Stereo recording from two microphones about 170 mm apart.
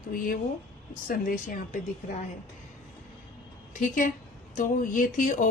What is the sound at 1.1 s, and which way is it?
Speech, 50° left (ahead or behind).